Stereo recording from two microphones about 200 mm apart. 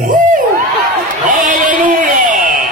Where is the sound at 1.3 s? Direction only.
40° right (ahead or behind).